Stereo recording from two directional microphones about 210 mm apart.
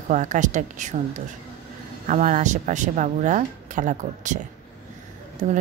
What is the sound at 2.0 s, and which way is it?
A woman's voice, 35° right (ahead or behind).